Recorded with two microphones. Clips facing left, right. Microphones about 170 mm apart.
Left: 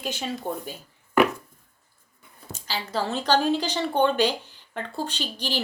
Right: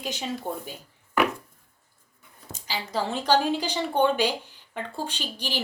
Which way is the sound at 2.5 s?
15° right (ahead or behind).